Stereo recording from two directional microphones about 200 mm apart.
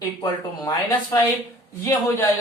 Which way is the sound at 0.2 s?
20° left (ahead or behind).